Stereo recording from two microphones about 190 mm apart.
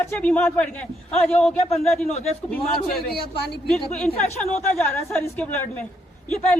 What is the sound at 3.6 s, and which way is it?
Speech, 5° left (ahead or behind).